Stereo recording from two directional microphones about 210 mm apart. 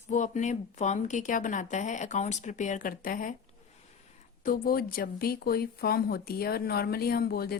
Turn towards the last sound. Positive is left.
turn(degrees=45)  # may be behind; listen again after turning